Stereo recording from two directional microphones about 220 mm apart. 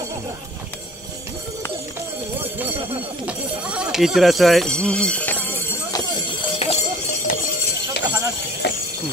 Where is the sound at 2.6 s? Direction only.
25° right (ahead or behind).